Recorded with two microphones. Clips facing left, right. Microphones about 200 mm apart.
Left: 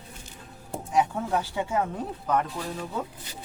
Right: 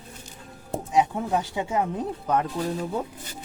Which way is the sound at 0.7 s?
20° right (ahead or behind).